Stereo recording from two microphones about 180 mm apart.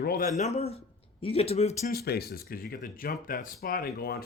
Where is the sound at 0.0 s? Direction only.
55° left (ahead or behind).